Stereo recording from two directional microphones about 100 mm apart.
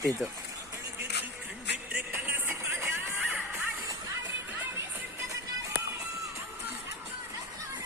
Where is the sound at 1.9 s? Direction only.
15° right (ahead or behind).